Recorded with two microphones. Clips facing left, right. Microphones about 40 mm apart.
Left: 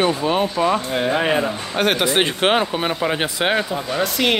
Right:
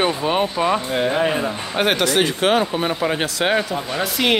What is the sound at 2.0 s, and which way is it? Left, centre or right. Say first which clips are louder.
Speech: even; left.